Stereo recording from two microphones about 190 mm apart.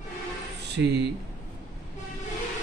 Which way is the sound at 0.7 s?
65° right (ahead or behind).